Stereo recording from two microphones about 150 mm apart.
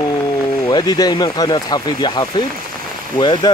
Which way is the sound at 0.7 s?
25° left (ahead or behind).